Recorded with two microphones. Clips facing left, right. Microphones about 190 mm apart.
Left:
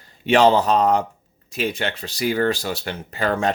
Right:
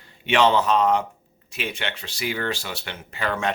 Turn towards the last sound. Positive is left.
turn(degrees=40)  # may be behind; listen again after turning